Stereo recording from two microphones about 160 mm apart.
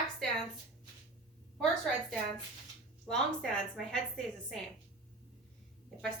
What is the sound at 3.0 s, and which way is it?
A woman's voice, 5° left (ahead or behind).